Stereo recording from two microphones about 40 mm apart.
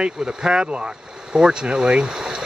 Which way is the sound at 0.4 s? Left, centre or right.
Right.